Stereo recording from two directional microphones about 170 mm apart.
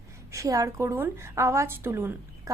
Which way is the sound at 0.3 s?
20° right (ahead or behind).